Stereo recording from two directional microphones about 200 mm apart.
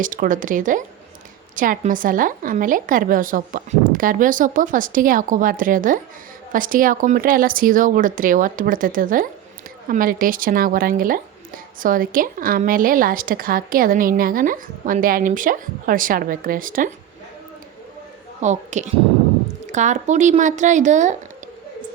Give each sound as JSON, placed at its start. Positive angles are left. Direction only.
{"t": 0.0, "sound": "speech", "side_deg": -40}
{"t": 18.4, "sound": "speech", "side_deg": -35}